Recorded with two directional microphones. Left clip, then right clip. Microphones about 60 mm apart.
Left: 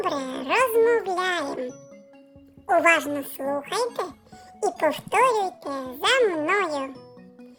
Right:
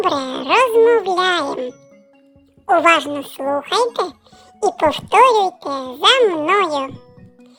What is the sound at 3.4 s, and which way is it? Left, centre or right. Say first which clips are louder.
A child's voice: right 10 dB; right.